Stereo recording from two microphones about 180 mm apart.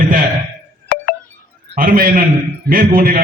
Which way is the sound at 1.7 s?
50° right (ahead or behind).